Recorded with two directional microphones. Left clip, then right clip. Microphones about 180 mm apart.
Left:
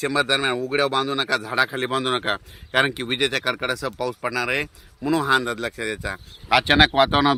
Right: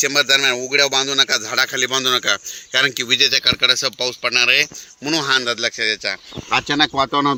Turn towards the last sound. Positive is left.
turn(degrees=10)  # may be behind; listen again after turning